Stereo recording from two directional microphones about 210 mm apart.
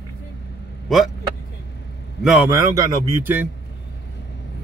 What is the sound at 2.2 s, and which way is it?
A man's voice, 10° right (ahead or behind).